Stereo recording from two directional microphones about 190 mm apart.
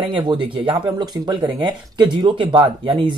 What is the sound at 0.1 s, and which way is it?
Speech, 25° right (ahead or behind).